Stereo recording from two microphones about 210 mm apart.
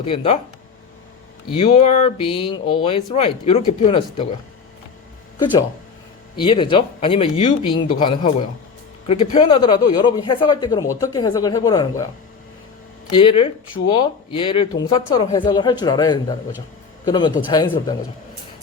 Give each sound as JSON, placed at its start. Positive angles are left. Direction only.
{"t": 0.0, "sound": "speech", "side_deg": 25}
{"t": 1.5, "sound": "speech", "side_deg": 25}
{"t": 6.3, "sound": "speech", "side_deg": 20}
{"t": 13.1, "sound": "speech", "side_deg": 25}